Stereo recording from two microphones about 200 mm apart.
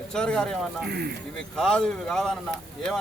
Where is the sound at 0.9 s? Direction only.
55° right (ahead or behind).